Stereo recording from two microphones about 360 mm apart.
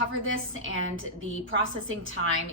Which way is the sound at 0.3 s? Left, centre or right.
Right.